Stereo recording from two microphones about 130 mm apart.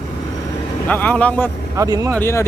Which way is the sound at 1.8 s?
25° right (ahead or behind).